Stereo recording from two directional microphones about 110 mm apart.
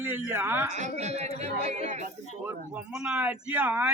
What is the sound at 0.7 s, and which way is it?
Speech, 90° right.